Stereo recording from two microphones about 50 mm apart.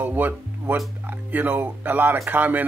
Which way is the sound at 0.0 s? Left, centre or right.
Right.